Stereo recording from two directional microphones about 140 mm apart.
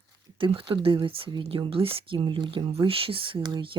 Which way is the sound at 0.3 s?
40° right (ahead or behind).